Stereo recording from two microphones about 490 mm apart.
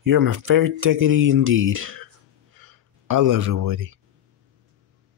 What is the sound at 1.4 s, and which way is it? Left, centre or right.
Speech, right.